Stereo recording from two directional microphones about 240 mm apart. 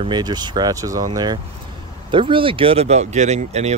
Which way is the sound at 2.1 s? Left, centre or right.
Right.